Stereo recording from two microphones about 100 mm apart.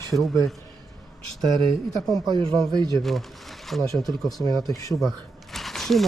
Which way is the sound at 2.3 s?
60° right (ahead or behind).